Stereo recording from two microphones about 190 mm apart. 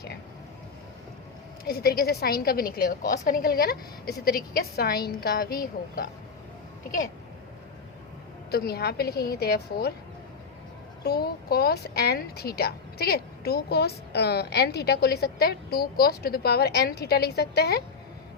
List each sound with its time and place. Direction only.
1.6 s a woman's voice: 55° left (ahead or behind)
8.4 s speech: 55° left (ahead or behind)
11.0 s speech: 55° left (ahead or behind)